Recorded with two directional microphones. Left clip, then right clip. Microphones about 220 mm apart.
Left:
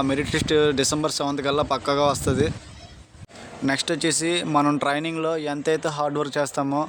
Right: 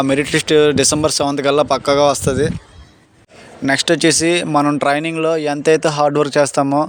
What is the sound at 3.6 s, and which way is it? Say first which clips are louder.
Speech: right 9 dB; 30° right (ahead or behind).